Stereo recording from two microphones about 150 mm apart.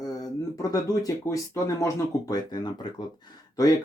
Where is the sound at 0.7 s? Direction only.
25° left (ahead or behind).